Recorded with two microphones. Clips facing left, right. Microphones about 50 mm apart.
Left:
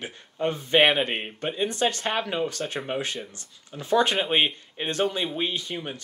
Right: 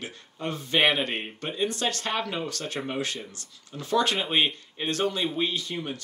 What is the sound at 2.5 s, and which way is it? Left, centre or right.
Speech, left.